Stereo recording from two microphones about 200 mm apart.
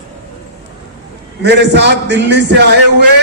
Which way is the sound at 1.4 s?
55° right (ahead or behind).